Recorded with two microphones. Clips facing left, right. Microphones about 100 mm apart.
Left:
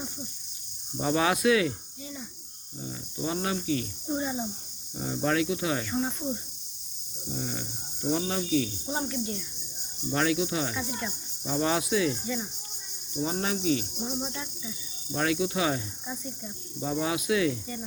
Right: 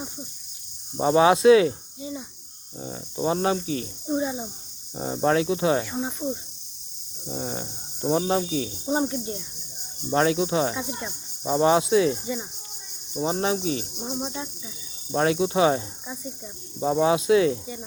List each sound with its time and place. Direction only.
0.9 s speech: 25° right (ahead or behind)
4.1 s cricket: 5° right (ahead or behind)
4.9 s speech: 35° right (ahead or behind)
5.8 s cricket: 5° right (ahead or behind)
7.3 s speech: 35° right (ahead or behind)
10.8 s cricket: 20° right (ahead or behind)
11.5 s speech: 25° right (ahead or behind)
15.1 s speech: 30° right (ahead or behind)
16.8 s speech: 30° right (ahead or behind)